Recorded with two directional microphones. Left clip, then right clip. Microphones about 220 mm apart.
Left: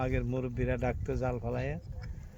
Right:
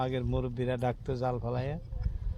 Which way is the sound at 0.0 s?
5° right (ahead or behind).